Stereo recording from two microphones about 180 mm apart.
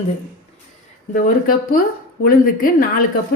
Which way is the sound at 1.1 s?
50° left (ahead or behind).